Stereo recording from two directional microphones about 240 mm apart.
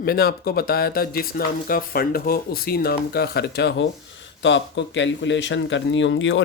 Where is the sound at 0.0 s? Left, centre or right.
Left.